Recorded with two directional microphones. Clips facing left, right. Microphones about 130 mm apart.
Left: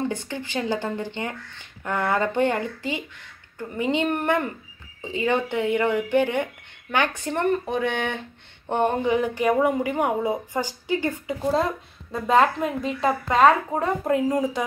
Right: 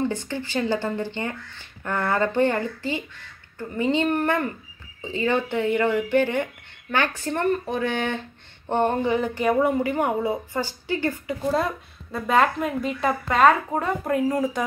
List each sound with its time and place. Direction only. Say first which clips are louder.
0.1 s speech: right 2 dB; 15° left (ahead or behind)
13.4 s speech: even; centre (ahead or behind)
13.7 s speech: left 1 dB; 20° left (ahead or behind)